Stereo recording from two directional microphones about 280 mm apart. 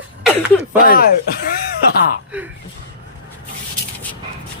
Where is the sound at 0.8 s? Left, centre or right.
Left.